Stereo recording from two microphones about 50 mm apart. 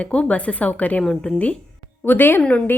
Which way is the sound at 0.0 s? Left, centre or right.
Left.